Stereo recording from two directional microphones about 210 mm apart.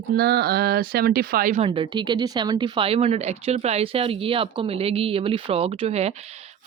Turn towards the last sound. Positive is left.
turn(degrees=-30)  # may be behind; listen again after turning